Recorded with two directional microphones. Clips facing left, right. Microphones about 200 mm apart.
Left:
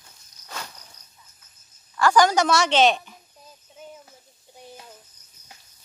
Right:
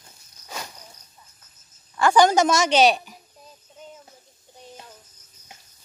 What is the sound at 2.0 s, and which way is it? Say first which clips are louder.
A woman's voice: right 2 dB; 25° right (ahead or behind).